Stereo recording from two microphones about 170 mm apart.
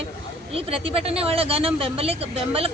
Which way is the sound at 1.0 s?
35° right (ahead or behind).